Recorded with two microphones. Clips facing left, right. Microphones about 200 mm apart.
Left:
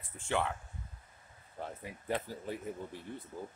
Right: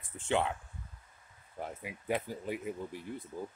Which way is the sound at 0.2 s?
20° right (ahead or behind).